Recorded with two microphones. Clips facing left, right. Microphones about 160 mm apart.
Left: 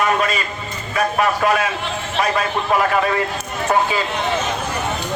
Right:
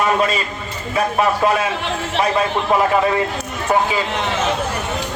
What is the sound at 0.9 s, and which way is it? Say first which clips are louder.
Speech: right 1 dB; 25° right (ahead or behind).